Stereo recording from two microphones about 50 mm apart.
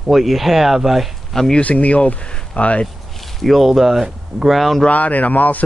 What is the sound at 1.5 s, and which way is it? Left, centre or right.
Speech, left.